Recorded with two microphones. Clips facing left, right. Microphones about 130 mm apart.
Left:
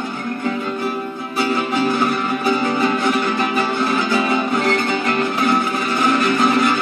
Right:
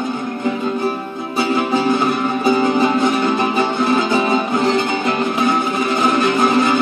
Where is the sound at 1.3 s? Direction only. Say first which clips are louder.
Right 2 dB; 20° right (ahead or behind).